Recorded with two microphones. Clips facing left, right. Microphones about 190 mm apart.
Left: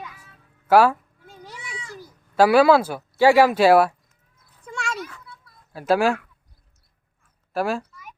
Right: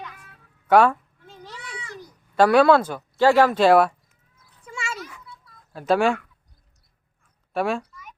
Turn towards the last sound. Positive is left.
turn(degrees=0)  # may be behind; listen again after turning